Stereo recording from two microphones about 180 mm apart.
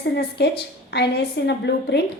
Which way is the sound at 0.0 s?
65° left (ahead or behind).